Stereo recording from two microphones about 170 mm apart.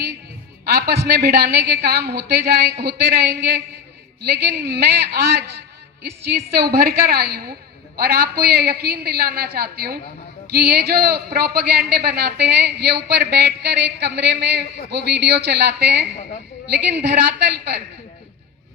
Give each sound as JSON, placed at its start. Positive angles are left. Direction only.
{"t": 0.6, "sound": "a man's voice", "side_deg": -70}